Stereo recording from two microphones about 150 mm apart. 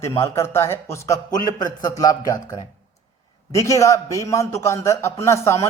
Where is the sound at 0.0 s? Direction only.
20° left (ahead or behind).